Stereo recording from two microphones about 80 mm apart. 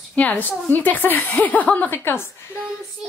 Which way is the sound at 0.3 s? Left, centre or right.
Left.